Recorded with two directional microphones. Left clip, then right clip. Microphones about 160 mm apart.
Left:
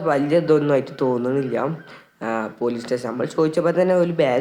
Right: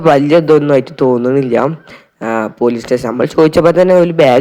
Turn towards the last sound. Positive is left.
turn(degrees=-35)  # may be behind; listen again after turning